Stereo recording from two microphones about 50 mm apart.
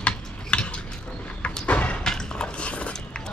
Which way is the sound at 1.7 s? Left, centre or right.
Left.